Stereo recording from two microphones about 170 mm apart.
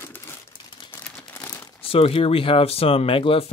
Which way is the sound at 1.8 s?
35° left (ahead or behind).